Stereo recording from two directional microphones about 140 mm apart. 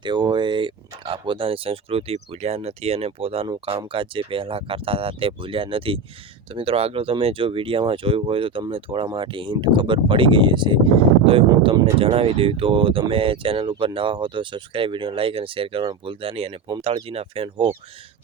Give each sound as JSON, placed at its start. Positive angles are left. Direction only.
{"t": 0.0, "sound": "speech", "side_deg": -30}